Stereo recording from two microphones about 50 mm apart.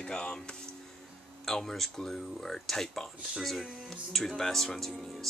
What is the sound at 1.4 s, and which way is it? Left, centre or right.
Speech, centre.